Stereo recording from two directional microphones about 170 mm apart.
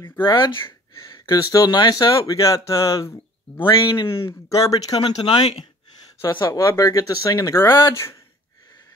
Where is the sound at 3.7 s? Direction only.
30° left (ahead or behind).